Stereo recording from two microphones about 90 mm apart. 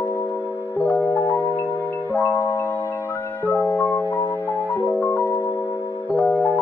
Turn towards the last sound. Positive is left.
turn(degrees=15)  # may be behind; listen again after turning